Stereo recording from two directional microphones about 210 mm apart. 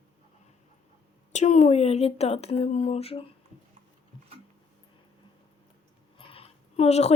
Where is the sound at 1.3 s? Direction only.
35° left (ahead or behind).